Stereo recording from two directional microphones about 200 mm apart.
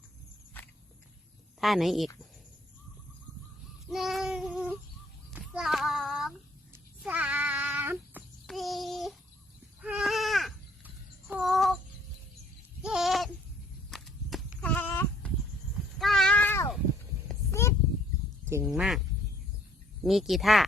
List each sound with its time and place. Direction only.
1.6 s speech: centre (ahead or behind)
3.8 s child singing: centre (ahead or behind)
7.0 s cat: 5° right (ahead or behind)
8.4 s child singing: centre (ahead or behind)
9.8 s sheep: centre (ahead or behind)
12.8 s goat: centre (ahead or behind)
13.9 s sheep: centre (ahead or behind)
16.0 s cat: centre (ahead or behind)
17.5 s a sound: 15° left (ahead or behind)
18.6 s speech: centre (ahead or behind)